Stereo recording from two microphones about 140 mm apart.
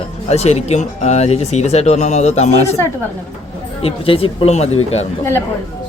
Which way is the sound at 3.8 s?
40° left (ahead or behind).